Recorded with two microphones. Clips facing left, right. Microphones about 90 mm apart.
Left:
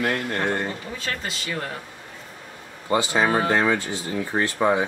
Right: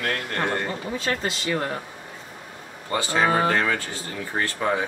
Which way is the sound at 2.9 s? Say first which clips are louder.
Left 1 dB; 15° left (ahead or behind).